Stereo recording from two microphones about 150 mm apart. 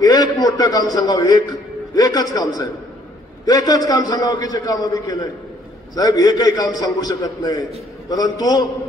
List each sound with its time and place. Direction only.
0.0 s a man's voice: 25° left (ahead or behind)